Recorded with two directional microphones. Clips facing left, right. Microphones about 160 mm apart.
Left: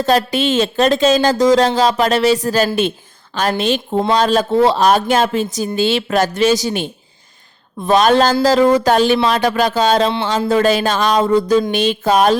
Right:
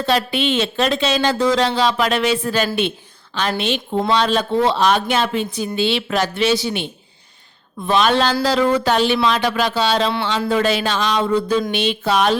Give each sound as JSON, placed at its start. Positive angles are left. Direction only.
{"t": 0.0, "sound": "a woman's voice", "side_deg": 40}